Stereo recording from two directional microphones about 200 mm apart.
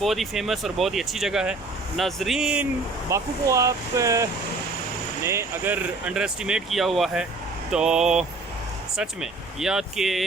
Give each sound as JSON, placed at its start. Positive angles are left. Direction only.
{"t": 0.0, "sound": "speech", "side_deg": 0}
{"t": 3.1, "sound": "speech", "side_deg": -15}